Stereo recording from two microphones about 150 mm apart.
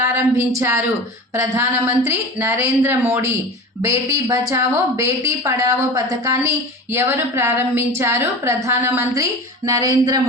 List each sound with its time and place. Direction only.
0.0 s a woman's voice: 20° right (ahead or behind)